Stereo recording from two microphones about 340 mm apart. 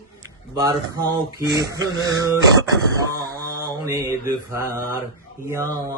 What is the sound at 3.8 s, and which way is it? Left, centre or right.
Speech, centre.